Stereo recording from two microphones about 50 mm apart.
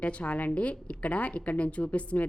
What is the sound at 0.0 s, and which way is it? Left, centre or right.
A woman's voice, left.